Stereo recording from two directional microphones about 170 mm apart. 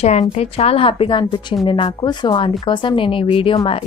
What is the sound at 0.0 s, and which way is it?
Speech, 40° left (ahead or behind).